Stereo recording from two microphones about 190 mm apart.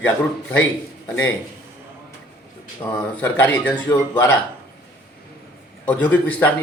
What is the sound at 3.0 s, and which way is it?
Speech, 10° left (ahead or behind).